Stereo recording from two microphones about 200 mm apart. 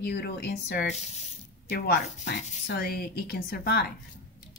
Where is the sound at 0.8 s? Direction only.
35° left (ahead or behind).